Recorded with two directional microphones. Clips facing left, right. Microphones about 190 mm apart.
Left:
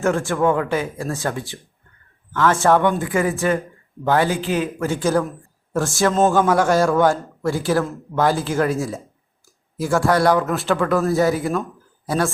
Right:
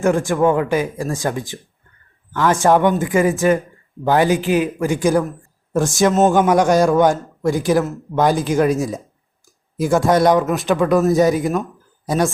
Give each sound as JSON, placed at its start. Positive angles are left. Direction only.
{"t": 0.0, "sound": "speech", "side_deg": -15}